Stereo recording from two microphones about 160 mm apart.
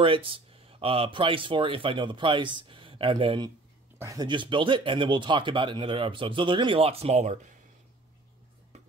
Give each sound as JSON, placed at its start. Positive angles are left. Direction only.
{"t": 0.0, "sound": "speech", "side_deg": -35}